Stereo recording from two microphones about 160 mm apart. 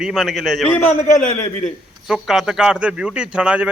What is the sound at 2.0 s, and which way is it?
A man's voice, centre (ahead or behind).